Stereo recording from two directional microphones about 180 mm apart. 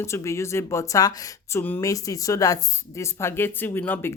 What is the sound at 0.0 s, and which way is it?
Speech, 15° left (ahead or behind).